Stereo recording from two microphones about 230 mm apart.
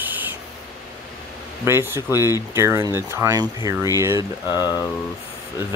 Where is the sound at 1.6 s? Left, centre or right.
Centre.